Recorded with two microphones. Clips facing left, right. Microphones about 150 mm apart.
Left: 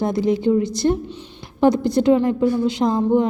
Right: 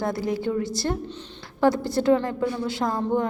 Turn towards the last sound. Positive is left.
turn(degrees=20)  # may be behind; listen again after turning